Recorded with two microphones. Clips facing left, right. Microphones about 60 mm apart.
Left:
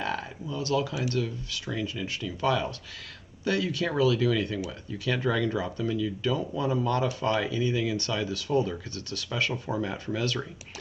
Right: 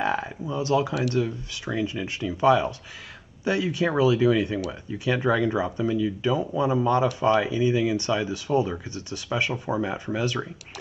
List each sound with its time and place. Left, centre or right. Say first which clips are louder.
0.0 s speech: right 6 dB; right